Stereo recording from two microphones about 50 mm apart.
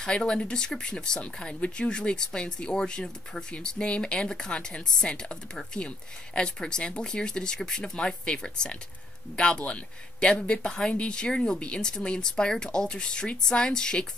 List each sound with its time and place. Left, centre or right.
0.0 s speech: centre